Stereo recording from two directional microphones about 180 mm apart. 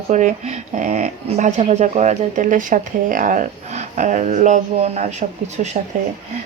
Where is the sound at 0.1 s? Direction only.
40° right (ahead or behind).